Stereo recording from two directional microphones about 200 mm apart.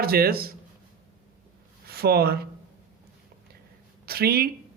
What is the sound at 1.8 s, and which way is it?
Speech, 50° right (ahead or behind).